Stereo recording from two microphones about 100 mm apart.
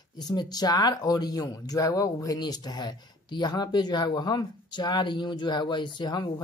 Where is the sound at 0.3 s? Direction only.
40° left (ahead or behind).